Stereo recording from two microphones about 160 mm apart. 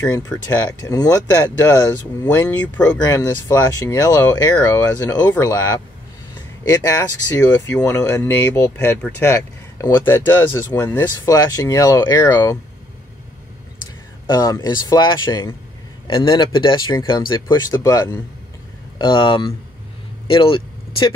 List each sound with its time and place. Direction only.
0.3 s speech: 10° left (ahead or behind)
0.7 s speech: 25° left (ahead or behind)
3.1 s speech: 20° left (ahead or behind)
14.3 s speech: 20° left (ahead or behind)
18.9 s speech: 30° left (ahead or behind)
20.2 s vehicle: 35° left (ahead or behind)